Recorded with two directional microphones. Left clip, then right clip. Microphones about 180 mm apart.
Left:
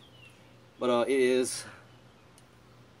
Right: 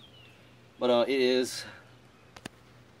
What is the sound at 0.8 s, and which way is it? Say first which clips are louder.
Speech: right 1 dB; 15° right (ahead or behind).